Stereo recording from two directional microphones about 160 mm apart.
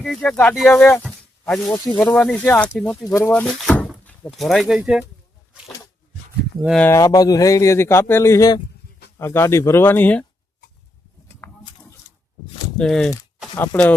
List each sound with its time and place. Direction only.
0.0 s speech: 5° left (ahead or behind)
1.0 s a sound: centre (ahead or behind)
1.7 s speech: 10° left (ahead or behind); by 5.0 s 5° right (ahead or behind)
6.7 s speech: 15° left (ahead or behind)
11.4 s a sound: 15° left (ahead or behind)
12.7 s speech: 5° left (ahead or behind)